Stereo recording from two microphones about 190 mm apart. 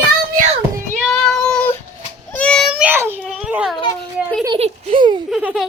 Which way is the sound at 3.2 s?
Centre (ahead or behind).